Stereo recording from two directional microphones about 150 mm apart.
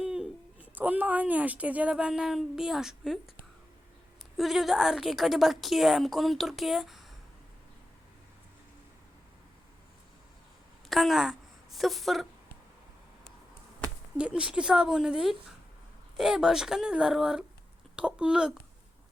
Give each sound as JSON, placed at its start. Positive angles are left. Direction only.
{"t": 0.0, "sound": "speech", "side_deg": -5}
{"t": 4.4, "sound": "a woman's voice", "side_deg": 0}
{"t": 10.8, "sound": "a woman's voice", "side_deg": 0}
{"t": 14.2, "sound": "a woman's voice", "side_deg": -5}